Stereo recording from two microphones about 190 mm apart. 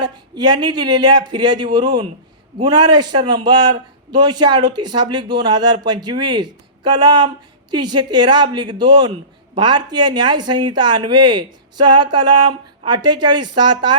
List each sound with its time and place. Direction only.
0.0 s speech: 25° right (ahead or behind)